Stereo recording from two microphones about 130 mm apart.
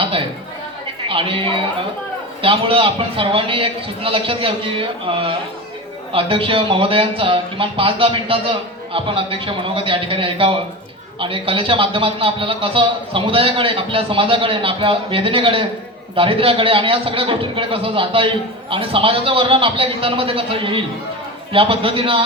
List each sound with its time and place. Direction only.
1.0 s speech: 45° right (ahead or behind)